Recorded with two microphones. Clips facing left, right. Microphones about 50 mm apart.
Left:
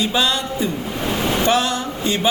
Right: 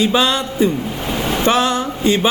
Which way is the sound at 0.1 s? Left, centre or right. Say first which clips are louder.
Right 4 dB; right.